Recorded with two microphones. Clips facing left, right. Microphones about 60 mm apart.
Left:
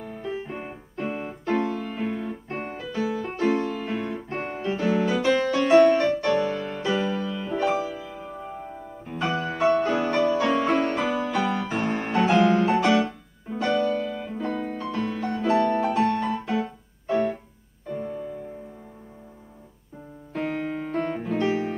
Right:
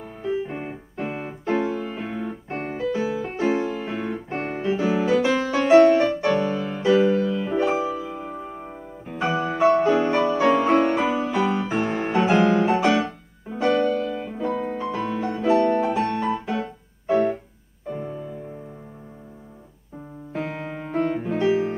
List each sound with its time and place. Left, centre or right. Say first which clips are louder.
0.2 s keyboard: right 7 dB; centre
2.0 s piano: left 1 dB; centre
3.0 s music: left 4 dB; centre
17.8 s music: even; centre
20.3 s music: left 1 dB; centre
20.6 s music: right 2 dB; centre